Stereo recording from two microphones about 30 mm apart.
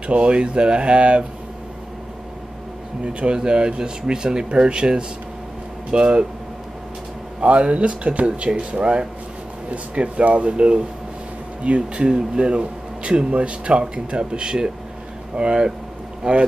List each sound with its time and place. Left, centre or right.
0.0 s speech: right
3.0 s speech: right
7.3 s speech: right